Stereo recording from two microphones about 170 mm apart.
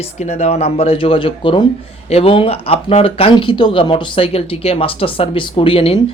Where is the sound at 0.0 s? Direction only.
40° left (ahead or behind).